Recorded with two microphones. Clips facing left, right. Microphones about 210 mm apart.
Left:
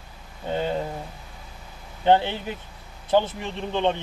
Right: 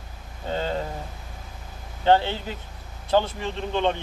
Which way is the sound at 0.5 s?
15° left (ahead or behind).